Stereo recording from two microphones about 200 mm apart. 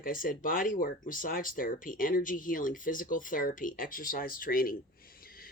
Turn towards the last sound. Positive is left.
turn(degrees=45)  # may be behind; listen again after turning